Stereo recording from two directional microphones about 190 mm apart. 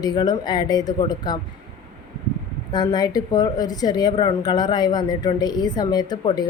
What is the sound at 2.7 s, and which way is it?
A woman's voice, 20° left (ahead or behind).